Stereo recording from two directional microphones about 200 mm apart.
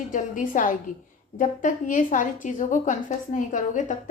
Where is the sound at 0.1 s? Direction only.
40° left (ahead or behind).